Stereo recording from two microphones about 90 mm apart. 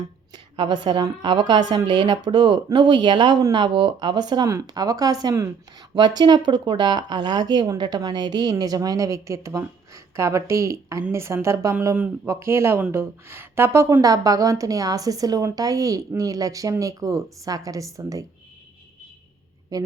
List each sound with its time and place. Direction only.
0.3 s a woman's voice: 65° right (ahead or behind); by 5.5 s 40° right (ahead or behind)
5.9 s a woman's voice: 60° right (ahead or behind); by 18.3 s 35° right (ahead or behind)
19.7 s a woman's voice: 40° right (ahead or behind)